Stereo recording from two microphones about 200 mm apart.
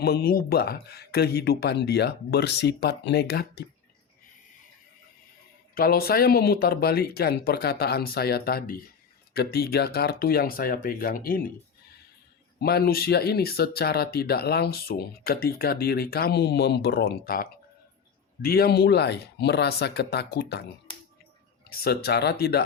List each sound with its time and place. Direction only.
0.0 s speech: 50° left (ahead or behind)
5.7 s speech: 50° left (ahead or behind)
12.5 s speech: 50° left (ahead or behind)
21.7 s speech: 55° left (ahead or behind)